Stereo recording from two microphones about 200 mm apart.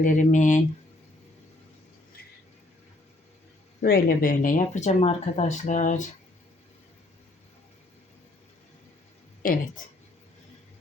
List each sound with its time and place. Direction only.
0.0 s speech: 40° left (ahead or behind)
3.8 s speech: 45° left (ahead or behind)
9.4 s speech: 45° left (ahead or behind)